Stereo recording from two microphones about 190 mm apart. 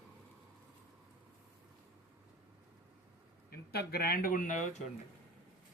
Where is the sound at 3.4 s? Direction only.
55° left (ahead or behind).